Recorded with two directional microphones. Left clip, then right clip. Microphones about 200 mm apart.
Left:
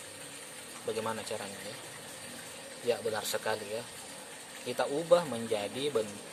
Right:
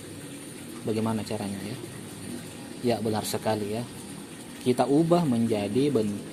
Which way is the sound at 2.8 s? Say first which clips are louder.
Right 4 dB; 15° right (ahead or behind).